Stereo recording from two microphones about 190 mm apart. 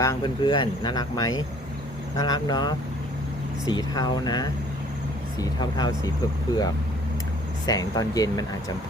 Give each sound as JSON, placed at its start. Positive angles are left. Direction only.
{"t": 0.0, "sound": "speech", "side_deg": 20}
{"t": 7.7, "sound": "speech", "side_deg": 20}